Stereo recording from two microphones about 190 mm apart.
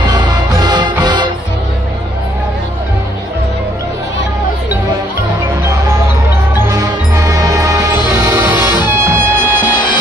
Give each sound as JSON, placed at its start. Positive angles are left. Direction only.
{"t": 0.0, "sound": "music", "side_deg": -20}
{"t": 6.5, "sound": "music", "side_deg": -15}
{"t": 9.6, "sound": "music", "side_deg": 20}